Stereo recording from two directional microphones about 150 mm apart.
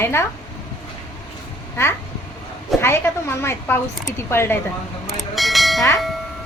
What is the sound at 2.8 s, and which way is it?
A woman's voice, 15° left (ahead or behind).